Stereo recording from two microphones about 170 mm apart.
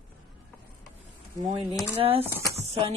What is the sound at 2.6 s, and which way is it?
Speech, 35° right (ahead or behind).